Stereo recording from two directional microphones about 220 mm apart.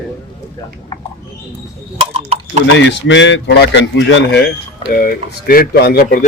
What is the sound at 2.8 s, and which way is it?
Speech, 55° left (ahead or behind).